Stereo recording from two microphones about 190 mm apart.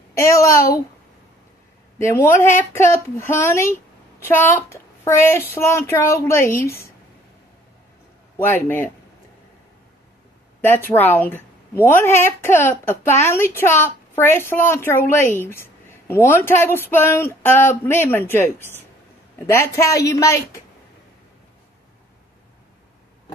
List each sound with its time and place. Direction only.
0.1 s a woman's voice: 15° left (ahead or behind)
2.0 s a woman's voice: 15° left (ahead or behind)
8.4 s a woman's voice: 10° left (ahead or behind)
11.1 s a woman's voice: 10° left (ahead or behind)